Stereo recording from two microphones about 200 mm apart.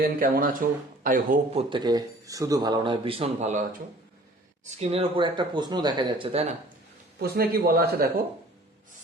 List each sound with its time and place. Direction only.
0.0 s a man's voice: 45° right (ahead or behind)
1.5 s speech: 25° right (ahead or behind)
4.8 s speech: 30° right (ahead or behind)
7.2 s a man's voice: 50° right (ahead or behind)